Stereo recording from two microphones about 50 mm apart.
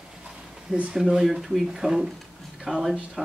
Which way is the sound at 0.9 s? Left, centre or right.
Centre.